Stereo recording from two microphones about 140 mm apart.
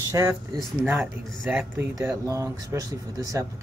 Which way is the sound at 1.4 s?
5° right (ahead or behind).